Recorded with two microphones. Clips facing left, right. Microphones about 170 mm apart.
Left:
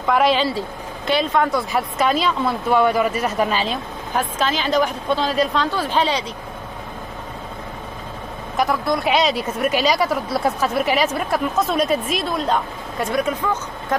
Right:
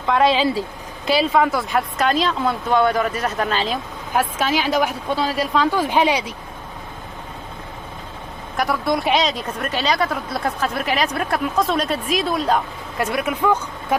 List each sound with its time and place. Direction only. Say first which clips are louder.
0.2 s speech: right 1 dB; centre (ahead or behind)
4.1 s a woman's voice: right 2 dB; 10° right (ahead or behind)
8.5 s speech: left 1 dB; centre (ahead or behind)